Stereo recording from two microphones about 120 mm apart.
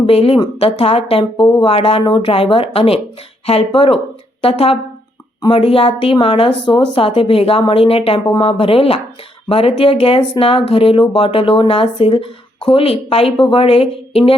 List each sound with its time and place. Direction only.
0.0 s a woman's voice: 55° left (ahead or behind)